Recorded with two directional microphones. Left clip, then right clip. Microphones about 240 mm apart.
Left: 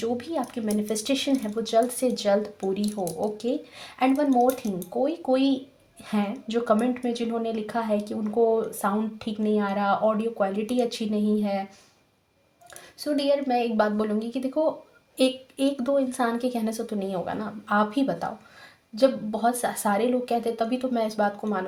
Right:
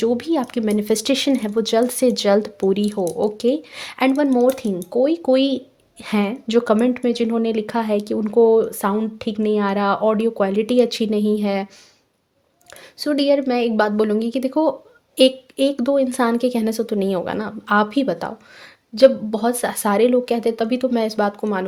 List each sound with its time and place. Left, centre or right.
0.0 s speech: right
13.0 s speech: right